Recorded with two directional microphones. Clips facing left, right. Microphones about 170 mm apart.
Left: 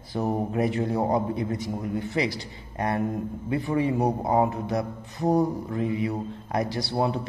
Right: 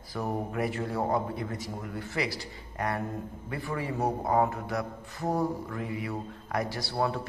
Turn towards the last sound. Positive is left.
turn(degrees=20)  # may be behind; listen again after turning